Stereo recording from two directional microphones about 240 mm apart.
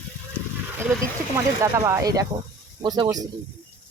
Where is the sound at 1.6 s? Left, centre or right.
Centre.